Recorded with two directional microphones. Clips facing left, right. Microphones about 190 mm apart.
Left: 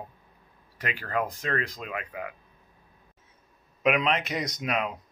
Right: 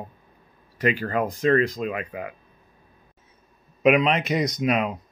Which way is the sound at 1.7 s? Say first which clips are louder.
Right 7 dB; 35° right (ahead or behind).